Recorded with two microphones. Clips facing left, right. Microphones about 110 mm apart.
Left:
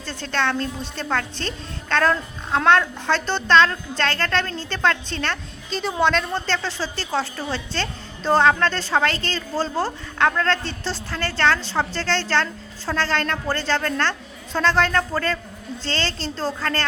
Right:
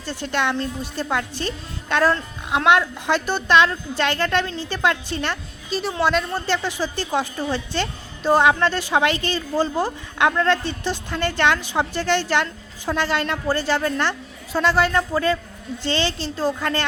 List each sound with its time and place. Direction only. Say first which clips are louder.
0.0 s speech: right 1 dB; 15° right (ahead or behind)